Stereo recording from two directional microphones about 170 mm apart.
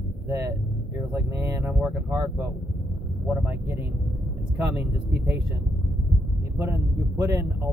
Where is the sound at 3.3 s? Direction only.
10° right (ahead or behind).